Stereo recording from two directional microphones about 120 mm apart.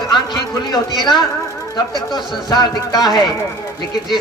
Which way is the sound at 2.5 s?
35° left (ahead or behind).